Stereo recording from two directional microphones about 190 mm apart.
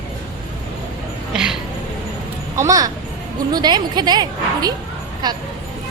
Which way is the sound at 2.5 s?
15° right (ahead or behind).